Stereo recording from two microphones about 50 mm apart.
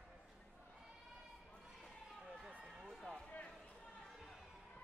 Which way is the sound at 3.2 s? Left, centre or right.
Left.